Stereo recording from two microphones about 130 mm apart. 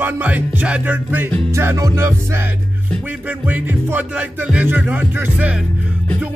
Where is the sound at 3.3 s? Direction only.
10° right (ahead or behind).